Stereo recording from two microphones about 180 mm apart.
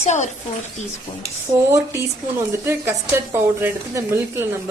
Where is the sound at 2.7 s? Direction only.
15° right (ahead or behind).